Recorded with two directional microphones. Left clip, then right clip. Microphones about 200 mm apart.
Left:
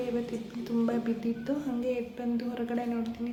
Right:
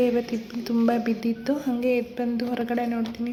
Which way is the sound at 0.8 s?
35° right (ahead or behind).